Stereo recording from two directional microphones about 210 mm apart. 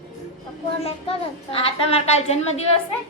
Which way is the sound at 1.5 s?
25° left (ahead or behind).